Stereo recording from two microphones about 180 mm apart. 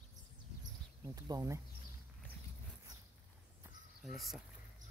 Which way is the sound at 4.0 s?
Centre (ahead or behind).